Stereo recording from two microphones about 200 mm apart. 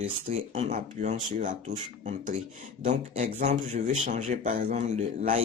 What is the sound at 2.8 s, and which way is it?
Speech, 35° right (ahead or behind).